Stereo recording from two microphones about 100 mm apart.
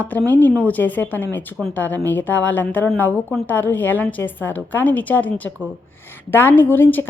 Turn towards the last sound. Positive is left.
turn(degrees=20)  # may be behind; listen again after turning